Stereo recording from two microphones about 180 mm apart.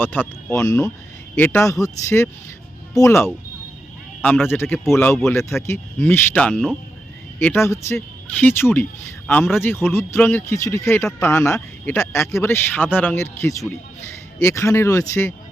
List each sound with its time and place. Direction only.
0.0 s speech: 10° left (ahead or behind)
4.4 s speech: 10° left (ahead or behind)
5.5 s speech: centre (ahead or behind)
7.3 s speech: 10° left (ahead or behind)